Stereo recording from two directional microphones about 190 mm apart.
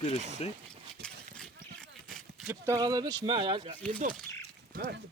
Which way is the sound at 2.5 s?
15° right (ahead or behind).